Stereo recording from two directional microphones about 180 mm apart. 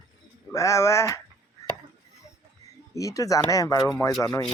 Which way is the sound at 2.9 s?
20° left (ahead or behind).